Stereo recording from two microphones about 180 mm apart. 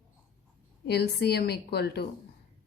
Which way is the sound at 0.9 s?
65° left (ahead or behind).